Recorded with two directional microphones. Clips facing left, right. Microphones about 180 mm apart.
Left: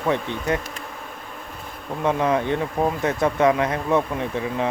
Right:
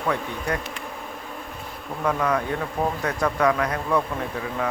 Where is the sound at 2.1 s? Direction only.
25° left (ahead or behind).